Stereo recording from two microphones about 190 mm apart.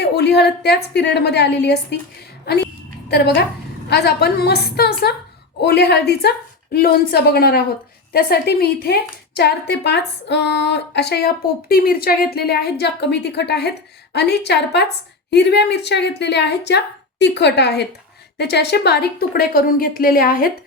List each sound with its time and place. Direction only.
0.0 s a woman's voice: 60° left (ahead or behind)
3.1 s a woman's voice: 60° left (ahead or behind)